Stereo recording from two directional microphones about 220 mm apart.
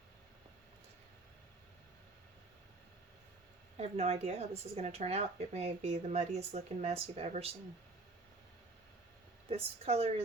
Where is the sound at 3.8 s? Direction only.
30° right (ahead or behind).